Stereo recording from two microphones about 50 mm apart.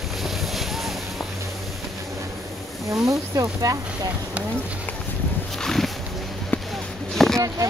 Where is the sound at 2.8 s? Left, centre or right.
Right.